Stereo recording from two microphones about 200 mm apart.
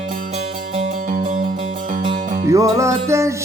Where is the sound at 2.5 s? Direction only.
15° right (ahead or behind).